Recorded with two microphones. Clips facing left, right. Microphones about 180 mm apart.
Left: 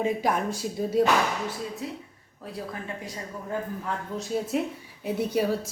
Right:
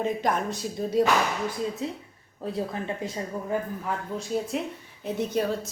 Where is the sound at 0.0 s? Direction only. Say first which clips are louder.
Left 1 dB; 5° left (ahead or behind).